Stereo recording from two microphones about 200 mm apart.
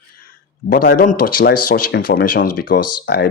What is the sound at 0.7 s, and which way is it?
Speech, 45° left (ahead or behind).